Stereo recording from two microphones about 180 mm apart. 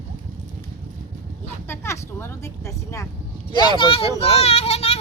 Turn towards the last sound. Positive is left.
turn(degrees=35)  # may be behind; listen again after turning